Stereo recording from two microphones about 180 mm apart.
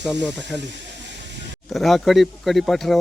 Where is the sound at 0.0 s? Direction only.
5° right (ahead or behind).